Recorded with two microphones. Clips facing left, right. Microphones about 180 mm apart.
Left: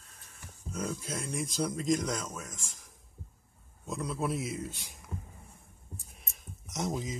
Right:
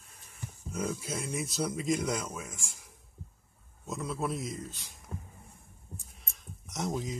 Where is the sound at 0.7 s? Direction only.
5° right (ahead or behind); by 5.0 s 10° left (ahead or behind).